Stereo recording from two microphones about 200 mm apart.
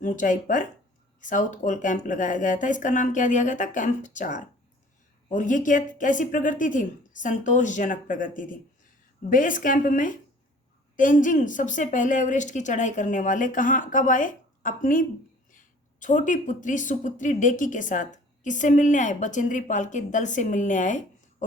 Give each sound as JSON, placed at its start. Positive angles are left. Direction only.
{"t": 0.0, "sound": "speech", "side_deg": 40}